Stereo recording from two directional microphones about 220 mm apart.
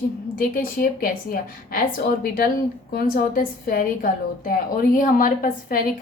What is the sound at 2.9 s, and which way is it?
A woman's voice, 40° left (ahead or behind).